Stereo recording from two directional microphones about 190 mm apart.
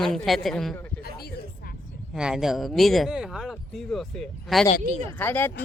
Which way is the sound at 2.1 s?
5° right (ahead or behind).